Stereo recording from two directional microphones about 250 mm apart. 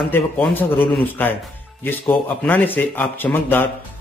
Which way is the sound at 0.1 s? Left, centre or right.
Centre.